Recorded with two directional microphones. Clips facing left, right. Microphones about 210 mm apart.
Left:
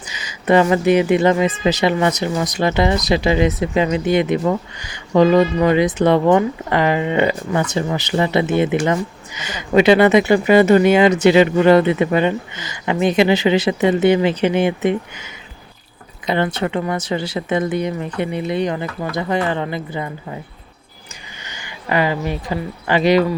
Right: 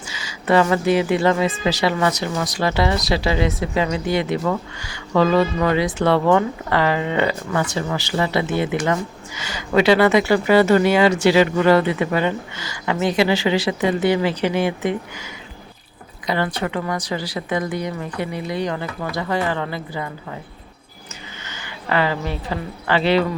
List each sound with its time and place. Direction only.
0.1 s a woman's voice: 20° left (ahead or behind)
21.4 s a woman's voice: 15° left (ahead or behind)